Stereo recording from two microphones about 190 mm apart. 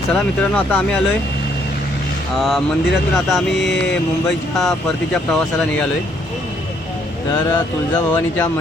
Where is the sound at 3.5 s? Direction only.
65° left (ahead or behind).